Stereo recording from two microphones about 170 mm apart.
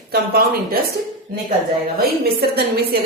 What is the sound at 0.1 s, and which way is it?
Speech, 65° right (ahead or behind).